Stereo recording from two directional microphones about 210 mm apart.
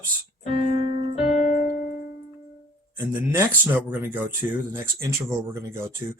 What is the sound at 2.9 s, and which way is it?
Speech, 10° right (ahead or behind).